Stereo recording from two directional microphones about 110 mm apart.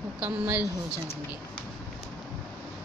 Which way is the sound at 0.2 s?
15° right (ahead or behind).